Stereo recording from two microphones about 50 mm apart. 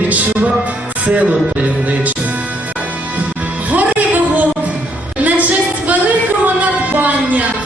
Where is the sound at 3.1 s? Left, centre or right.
Right.